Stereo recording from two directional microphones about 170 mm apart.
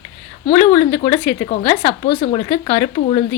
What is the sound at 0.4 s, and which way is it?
Speech, 35° left (ahead or behind).